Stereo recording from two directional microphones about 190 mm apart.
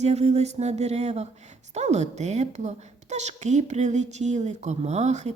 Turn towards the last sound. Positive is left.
turn(degrees=-35)  # may be behind; listen again after turning